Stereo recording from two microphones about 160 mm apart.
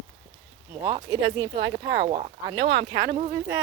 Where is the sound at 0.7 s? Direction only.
25° right (ahead or behind).